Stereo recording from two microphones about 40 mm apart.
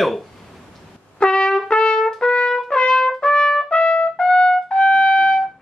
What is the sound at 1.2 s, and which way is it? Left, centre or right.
Trumpet, left.